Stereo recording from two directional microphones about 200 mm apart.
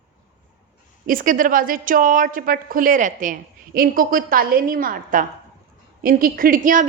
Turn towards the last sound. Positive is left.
turn(degrees=-40)  # may be behind; listen again after turning